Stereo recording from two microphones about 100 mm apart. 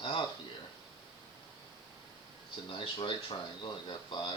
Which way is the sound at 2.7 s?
65° left (ahead or behind).